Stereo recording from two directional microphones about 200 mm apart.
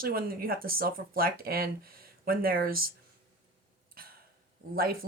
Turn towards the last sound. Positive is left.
turn(degrees=-50)  # may be behind; listen again after turning